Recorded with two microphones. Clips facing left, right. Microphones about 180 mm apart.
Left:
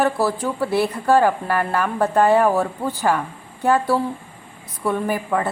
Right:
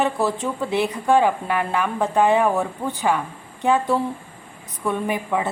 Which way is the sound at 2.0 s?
15° right (ahead or behind).